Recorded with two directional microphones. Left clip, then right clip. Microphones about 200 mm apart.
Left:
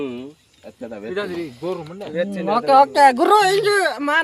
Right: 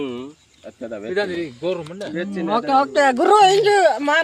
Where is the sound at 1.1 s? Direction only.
20° left (ahead or behind).